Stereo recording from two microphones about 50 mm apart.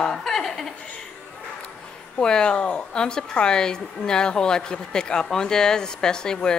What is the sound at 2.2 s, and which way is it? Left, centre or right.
A woman's voice, centre.